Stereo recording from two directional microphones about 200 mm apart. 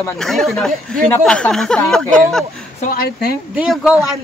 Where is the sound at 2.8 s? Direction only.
45° left (ahead or behind).